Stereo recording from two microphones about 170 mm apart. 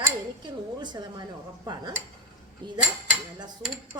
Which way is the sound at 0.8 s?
25° right (ahead or behind).